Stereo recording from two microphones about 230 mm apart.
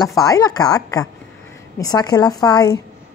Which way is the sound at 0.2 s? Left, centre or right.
Centre.